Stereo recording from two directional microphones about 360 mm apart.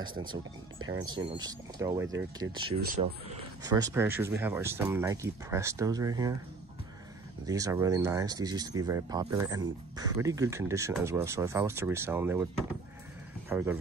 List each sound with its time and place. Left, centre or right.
0.0 s speech: right
0.7 s speech: right
1.0 s speech: centre
2.6 s speech: right
3.6 s speech: centre
7.4 s speech: centre
13.5 s speech: centre